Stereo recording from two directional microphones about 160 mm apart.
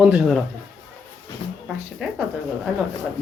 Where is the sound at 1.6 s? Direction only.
5° right (ahead or behind).